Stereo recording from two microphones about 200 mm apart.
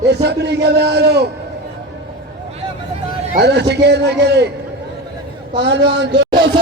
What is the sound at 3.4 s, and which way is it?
Speech, 55° right (ahead or behind).